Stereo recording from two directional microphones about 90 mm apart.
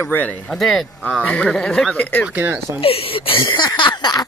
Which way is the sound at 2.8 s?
90° left.